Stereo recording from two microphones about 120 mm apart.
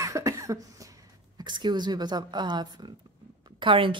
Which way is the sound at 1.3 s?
40° right (ahead or behind).